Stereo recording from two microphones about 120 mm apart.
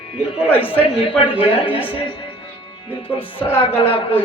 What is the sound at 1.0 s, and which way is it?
Speech, 45° left (ahead or behind).